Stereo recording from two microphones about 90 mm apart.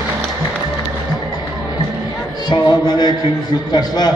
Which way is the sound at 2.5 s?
55° left (ahead or behind).